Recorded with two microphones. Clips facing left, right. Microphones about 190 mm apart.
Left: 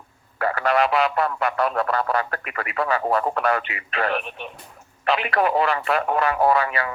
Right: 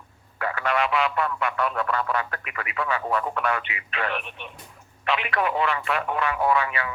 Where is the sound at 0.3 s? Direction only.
40° left (ahead or behind).